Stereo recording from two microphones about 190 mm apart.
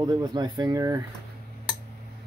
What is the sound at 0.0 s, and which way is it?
Speech, 20° right (ahead or behind).